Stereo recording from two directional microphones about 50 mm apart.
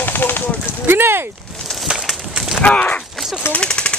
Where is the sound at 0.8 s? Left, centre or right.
Right.